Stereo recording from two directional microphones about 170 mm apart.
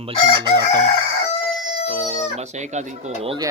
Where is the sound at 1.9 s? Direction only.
35° right (ahead or behind).